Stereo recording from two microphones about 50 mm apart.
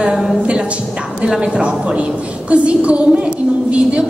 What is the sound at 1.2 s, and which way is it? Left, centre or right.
A woman's voice, centre.